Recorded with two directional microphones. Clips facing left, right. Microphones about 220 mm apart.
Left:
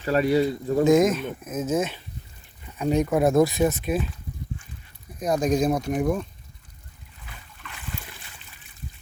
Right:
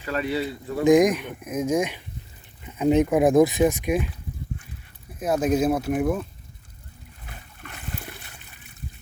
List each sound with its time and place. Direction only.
0.0 s speech: 40° left (ahead or behind)
0.9 s speech: 15° right (ahead or behind)
5.2 s speech: 5° right (ahead or behind)
7.3 s splash: 45° right (ahead or behind)
8.0 s water: 60° right (ahead or behind)